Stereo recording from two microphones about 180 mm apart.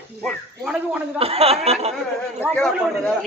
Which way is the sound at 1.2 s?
35° right (ahead or behind).